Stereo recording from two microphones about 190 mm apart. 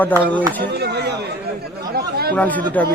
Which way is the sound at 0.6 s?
60° right (ahead or behind).